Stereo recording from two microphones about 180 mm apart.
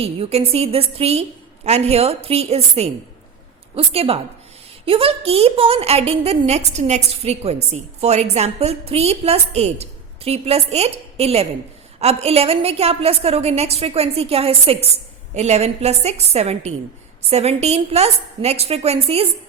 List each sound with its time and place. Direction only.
0.0 s a woman's voice: 35° right (ahead or behind)